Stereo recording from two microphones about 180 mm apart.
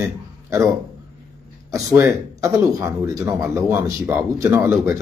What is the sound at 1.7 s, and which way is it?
Speech, 15° right (ahead or behind).